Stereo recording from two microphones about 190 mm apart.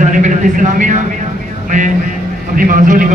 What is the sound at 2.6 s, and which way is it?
Speech, 45° right (ahead or behind).